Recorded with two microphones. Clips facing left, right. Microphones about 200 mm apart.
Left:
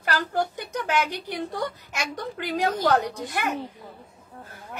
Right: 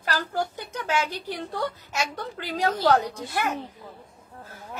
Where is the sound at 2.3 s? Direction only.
15° left (ahead or behind).